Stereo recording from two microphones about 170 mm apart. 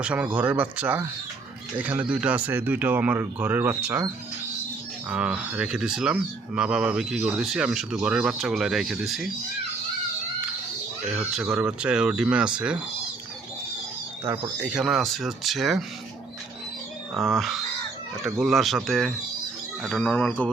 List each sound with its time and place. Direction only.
0.0 s speech: 5° right (ahead or behind)
11.3 s speech: 5° right (ahead or behind)
14.6 s speech: 5° right (ahead or behind)
17.2 s speech: centre (ahead or behind)